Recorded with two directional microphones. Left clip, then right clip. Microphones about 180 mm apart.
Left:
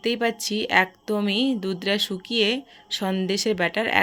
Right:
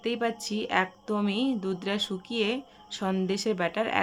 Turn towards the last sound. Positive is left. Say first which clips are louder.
# left 6 dB
turn(degrees=20)  # may be behind; listen again after turning